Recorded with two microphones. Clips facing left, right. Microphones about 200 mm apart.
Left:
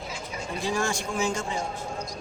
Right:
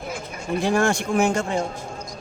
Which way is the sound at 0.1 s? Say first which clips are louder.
Right 9 dB; 60° right (ahead or behind).